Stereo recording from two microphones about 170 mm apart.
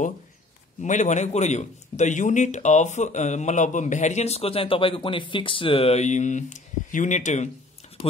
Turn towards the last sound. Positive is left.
turn(degrees=45)  # may be behind; listen again after turning